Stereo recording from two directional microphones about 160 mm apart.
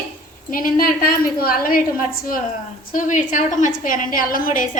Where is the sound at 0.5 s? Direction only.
65° left (ahead or behind).